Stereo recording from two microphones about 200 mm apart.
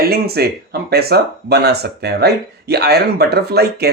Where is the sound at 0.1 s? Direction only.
50° right (ahead or behind).